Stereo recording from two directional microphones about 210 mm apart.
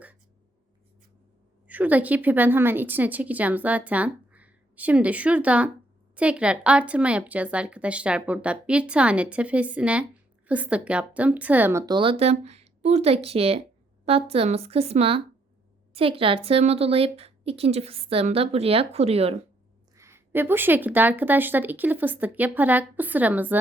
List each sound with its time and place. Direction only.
1.6 s a woman's voice: 10° right (ahead or behind); by 19.4 s 30° right (ahead or behind)
20.0 s speech: 10° right (ahead or behind)